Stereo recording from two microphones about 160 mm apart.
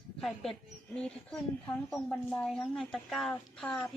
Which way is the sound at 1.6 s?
10° left (ahead or behind).